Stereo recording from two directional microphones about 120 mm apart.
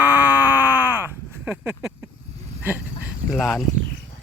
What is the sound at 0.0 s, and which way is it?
Groan, 15° right (ahead or behind).